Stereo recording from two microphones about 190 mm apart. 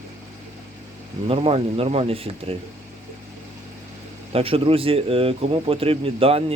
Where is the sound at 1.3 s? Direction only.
30° right (ahead or behind).